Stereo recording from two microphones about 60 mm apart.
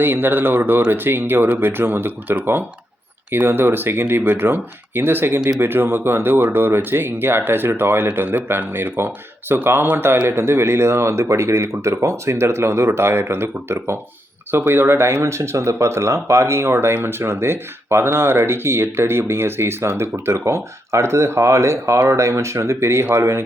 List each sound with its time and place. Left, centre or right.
0.0 s speech: right